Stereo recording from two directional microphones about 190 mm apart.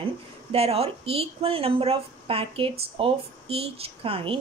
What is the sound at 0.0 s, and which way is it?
Speech, 30° right (ahead or behind).